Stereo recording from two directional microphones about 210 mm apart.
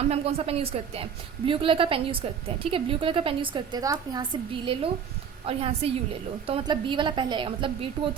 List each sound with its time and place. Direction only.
0.0 s a woman's voice: 30° right (ahead or behind)